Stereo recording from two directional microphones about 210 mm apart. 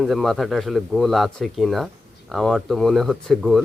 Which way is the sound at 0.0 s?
Centre (ahead or behind).